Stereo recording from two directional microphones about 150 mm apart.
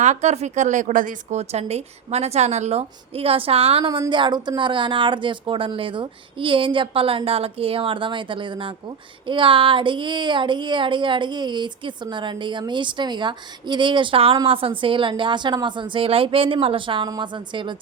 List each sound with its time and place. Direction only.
0.0 s speech: 50° right (ahead or behind); by 17.7 s 30° right (ahead or behind)